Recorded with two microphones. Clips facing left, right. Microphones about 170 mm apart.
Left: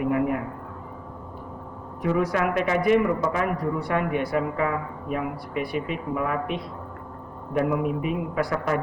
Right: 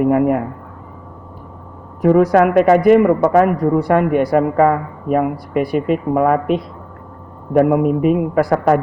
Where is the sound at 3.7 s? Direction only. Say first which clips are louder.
Right 11 dB; 45° right (ahead or behind).